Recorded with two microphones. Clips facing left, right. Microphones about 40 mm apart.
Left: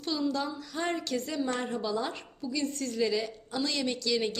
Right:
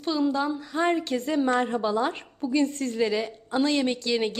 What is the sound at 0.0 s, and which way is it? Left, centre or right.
A woman's voice, right.